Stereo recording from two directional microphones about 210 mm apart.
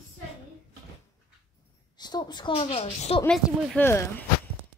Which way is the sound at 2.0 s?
20° left (ahead or behind).